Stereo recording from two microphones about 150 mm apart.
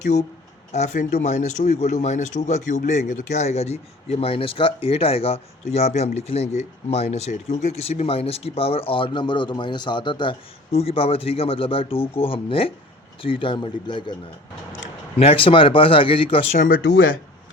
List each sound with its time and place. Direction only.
0.0 s speech: 50° left (ahead or behind); by 14.2 s 30° left (ahead or behind)
15.2 s speech: 40° left (ahead or behind)
16.6 s speech: 70° left (ahead or behind)